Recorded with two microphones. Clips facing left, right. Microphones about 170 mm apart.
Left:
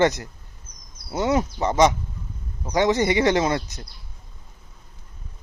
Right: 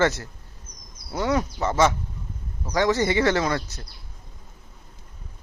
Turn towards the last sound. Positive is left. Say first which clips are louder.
# left 2 dB
turn(degrees=20)  # may be behind; listen again after turning